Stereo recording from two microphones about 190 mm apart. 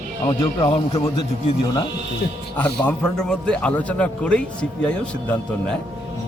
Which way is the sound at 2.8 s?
5° left (ahead or behind).